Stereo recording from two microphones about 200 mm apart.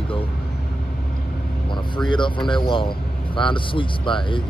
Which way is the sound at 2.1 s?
25° left (ahead or behind).